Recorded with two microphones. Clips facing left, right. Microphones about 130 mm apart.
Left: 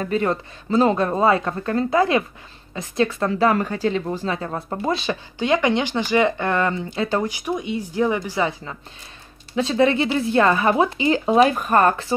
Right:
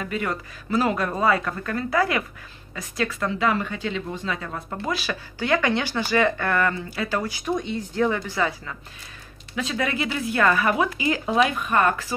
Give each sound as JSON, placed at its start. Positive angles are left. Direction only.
{"t": 0.0, "sound": "speech", "side_deg": 35}
{"t": 7.4, "sound": "a woman's voice", "side_deg": 10}
{"t": 9.5, "sound": "speech", "side_deg": 30}